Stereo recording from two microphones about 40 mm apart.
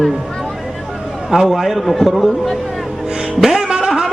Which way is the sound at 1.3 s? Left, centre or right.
Centre.